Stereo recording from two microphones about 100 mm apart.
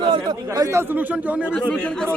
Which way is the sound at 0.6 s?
25° right (ahead or behind).